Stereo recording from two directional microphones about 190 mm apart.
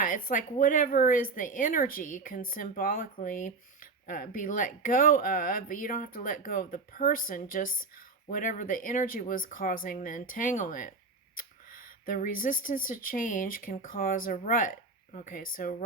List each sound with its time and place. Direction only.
0.0 s speech: 45° left (ahead or behind)